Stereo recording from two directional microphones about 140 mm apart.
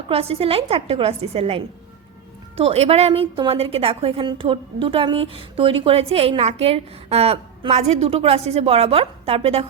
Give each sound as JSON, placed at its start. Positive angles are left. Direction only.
{"t": 0.1, "sound": "a woman's voice", "side_deg": -45}